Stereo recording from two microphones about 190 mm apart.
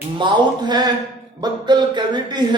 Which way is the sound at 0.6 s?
20° right (ahead or behind).